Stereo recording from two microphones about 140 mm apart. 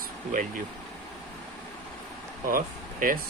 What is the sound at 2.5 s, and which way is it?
Speech, 80° right.